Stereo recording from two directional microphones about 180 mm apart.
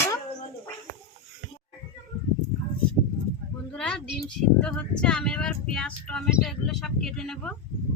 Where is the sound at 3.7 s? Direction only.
5° left (ahead or behind).